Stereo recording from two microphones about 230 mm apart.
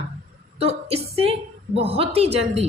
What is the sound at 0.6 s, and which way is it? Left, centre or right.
A woman's voice, right.